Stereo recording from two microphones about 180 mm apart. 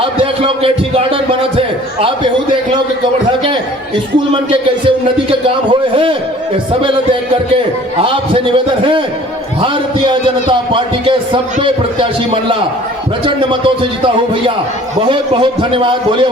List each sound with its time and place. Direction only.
0.0 s a man's voice: 30° right (ahead or behind)
4.9 s a man's voice: 30° right (ahead or behind)
7.9 s a man's voice: 30° right (ahead or behind)
15.0 s a man's voice: 30° right (ahead or behind)